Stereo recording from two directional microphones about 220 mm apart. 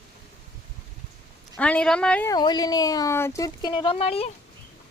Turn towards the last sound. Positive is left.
turn(degrees=25)  # may be behind; listen again after turning